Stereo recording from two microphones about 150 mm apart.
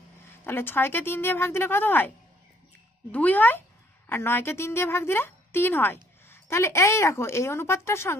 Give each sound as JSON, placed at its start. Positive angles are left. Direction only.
{"t": 0.3, "sound": "a woman's voice", "side_deg": 15}